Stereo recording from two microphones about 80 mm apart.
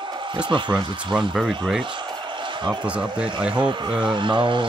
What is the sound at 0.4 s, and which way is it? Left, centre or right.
Speech, right.